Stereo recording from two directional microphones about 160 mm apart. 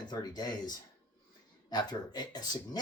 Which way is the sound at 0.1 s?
25° left (ahead or behind).